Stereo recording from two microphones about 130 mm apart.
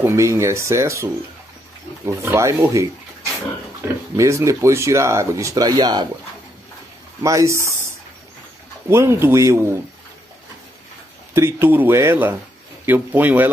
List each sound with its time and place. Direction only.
0.0 s speech: 20° right (ahead or behind)
7.2 s speech: 25° right (ahead or behind)
8.8 s speech: 20° right (ahead or behind)
11.3 s speech: 20° right (ahead or behind)